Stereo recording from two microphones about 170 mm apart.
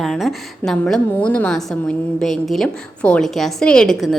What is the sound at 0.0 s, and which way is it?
A woman's voice, centre (ahead or behind).